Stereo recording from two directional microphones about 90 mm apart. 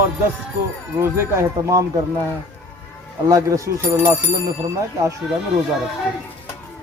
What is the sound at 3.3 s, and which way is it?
Speech, 40° right (ahead or behind).